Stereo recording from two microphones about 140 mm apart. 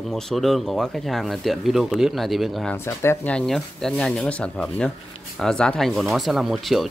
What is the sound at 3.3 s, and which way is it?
Speech, 5° left (ahead or behind).